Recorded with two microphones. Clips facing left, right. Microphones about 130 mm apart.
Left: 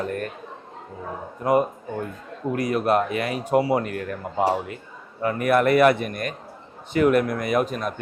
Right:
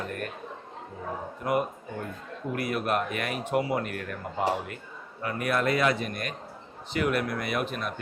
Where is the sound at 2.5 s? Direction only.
35° left (ahead or behind).